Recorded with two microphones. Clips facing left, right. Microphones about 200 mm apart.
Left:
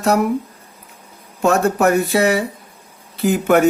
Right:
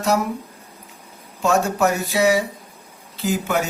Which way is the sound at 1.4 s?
60° left (ahead or behind).